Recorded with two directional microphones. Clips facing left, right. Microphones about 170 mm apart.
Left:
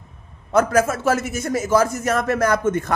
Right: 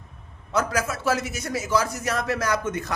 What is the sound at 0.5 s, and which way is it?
A man's voice, 50° left (ahead or behind).